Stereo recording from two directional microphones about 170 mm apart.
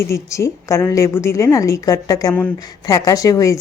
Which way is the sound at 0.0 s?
15° left (ahead or behind).